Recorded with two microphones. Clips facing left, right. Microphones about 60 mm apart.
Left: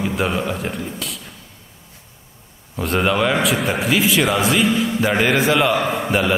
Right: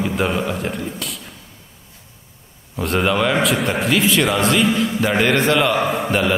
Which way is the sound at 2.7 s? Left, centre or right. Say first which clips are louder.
Even; centre.